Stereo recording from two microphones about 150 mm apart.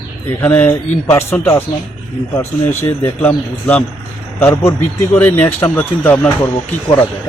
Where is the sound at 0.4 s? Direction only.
15° left (ahead or behind).